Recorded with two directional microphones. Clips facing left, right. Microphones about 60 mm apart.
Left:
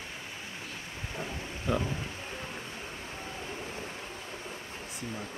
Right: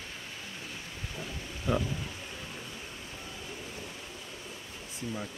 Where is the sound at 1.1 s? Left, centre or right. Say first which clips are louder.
Left 4 dB; left.